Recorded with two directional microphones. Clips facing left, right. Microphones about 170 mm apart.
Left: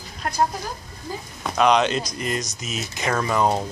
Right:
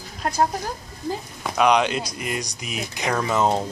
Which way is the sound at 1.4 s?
10° right (ahead or behind).